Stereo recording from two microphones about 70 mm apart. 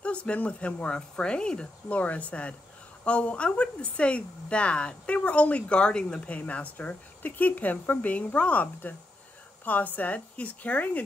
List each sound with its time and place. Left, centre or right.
0.0 s a woman's voice: centre